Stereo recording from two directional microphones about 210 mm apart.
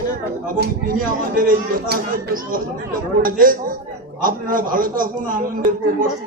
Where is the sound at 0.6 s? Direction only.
40° right (ahead or behind).